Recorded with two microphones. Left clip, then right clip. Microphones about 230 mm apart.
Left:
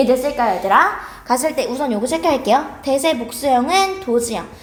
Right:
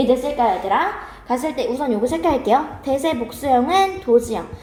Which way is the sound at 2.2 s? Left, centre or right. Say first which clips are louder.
Left 2 dB; left.